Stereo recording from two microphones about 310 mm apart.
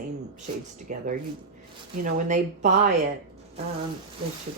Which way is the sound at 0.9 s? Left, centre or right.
Right.